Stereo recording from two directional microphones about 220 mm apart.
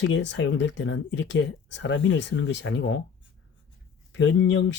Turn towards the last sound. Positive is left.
turn(degrees=55)  # may be behind; listen again after turning